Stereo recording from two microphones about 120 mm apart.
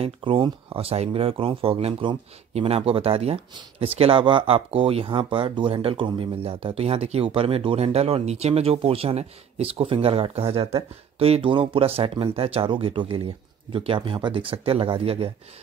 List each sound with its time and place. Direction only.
0.0 s speech: 45° right (ahead or behind)